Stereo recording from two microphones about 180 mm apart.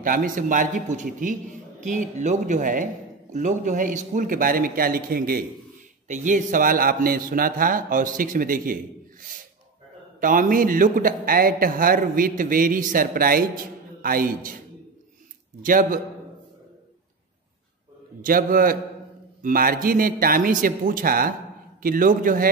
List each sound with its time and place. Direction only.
0.0 s a man's voice: 50° right (ahead or behind)
6.0 s a man's voice: 45° right (ahead or behind)
10.2 s a man's voice: 50° right (ahead or behind)
15.6 s a man's voice: 50° right (ahead or behind)
18.2 s a man's voice: 50° right (ahead or behind)